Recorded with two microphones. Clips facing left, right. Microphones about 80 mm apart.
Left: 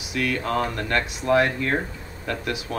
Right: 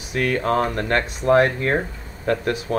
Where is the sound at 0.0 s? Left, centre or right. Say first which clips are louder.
Right 4 dB; right.